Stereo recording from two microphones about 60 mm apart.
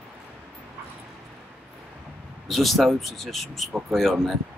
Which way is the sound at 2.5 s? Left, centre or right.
Centre.